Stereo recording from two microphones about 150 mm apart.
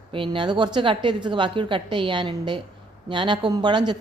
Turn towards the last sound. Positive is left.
turn(degrees=-30)  # may be behind; listen again after turning